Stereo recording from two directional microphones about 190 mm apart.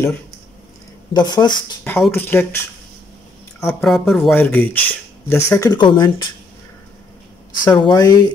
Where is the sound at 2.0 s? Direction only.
10° left (ahead or behind).